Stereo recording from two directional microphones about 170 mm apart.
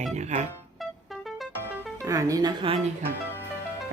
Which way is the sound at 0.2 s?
45° right (ahead or behind).